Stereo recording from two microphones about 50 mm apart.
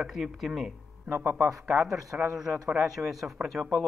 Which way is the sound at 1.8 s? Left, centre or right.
Centre.